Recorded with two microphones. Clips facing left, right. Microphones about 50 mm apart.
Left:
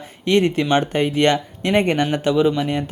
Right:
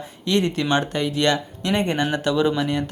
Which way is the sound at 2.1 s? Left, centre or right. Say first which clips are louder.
Left 3 dB; left.